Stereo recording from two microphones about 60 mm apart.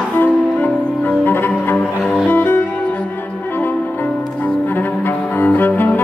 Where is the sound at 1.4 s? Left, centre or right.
Left.